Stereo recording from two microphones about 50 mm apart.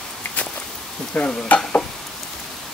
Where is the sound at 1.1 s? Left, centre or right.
Centre.